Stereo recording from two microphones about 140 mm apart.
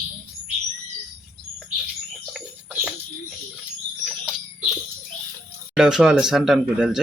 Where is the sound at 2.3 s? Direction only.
5° right (ahead or behind).